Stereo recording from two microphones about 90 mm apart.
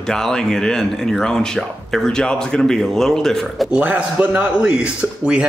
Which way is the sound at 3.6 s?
15° right (ahead or behind).